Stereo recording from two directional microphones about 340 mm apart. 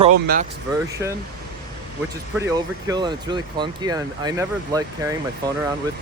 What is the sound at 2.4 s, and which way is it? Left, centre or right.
Speech, centre.